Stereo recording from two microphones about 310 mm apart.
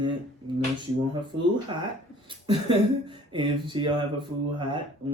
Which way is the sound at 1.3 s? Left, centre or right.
Right.